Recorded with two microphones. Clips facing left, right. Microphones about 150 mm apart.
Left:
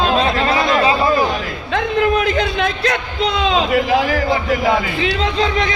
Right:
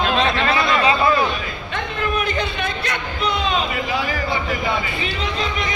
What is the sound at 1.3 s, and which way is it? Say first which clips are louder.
A man's voice: left 6 dB; 90° left.